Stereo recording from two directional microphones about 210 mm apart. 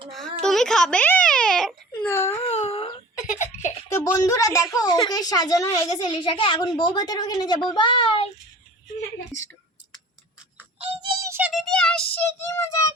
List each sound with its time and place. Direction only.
0.1 s a sound: centre (ahead or behind)
2.4 s giggle: 30° left (ahead or behind)
4.0 s a woman's voice: 15° left (ahead or behind)
10.8 s music: 25° right (ahead or behind); by 12.0 s 5° left (ahead or behind)
12.1 s child singing: 10° left (ahead or behind)